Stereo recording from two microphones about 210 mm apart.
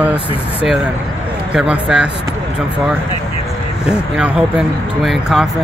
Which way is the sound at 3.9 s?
5° right (ahead or behind).